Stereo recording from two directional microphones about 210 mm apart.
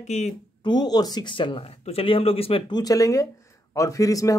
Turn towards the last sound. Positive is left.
turn(degrees=15)  # may be behind; listen again after turning